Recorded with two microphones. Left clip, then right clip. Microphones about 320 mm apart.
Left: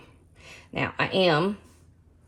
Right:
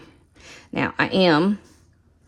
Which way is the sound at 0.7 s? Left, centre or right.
Right.